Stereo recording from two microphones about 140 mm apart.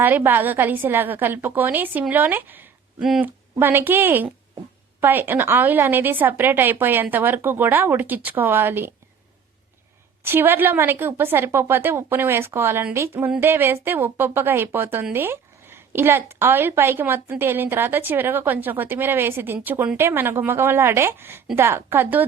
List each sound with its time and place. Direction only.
0.0 s a woman's voice: 15° right (ahead or behind)
10.2 s a woman's voice: 15° right (ahead or behind)